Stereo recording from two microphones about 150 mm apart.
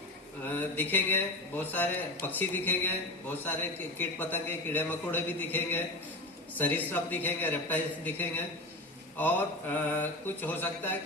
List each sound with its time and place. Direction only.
0.4 s a man's voice: 10° left (ahead or behind)